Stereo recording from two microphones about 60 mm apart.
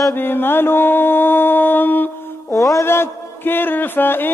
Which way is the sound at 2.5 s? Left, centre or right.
Left.